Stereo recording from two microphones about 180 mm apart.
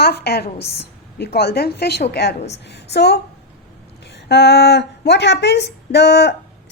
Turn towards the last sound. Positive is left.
turn(degrees=65)  # may be behind; listen again after turning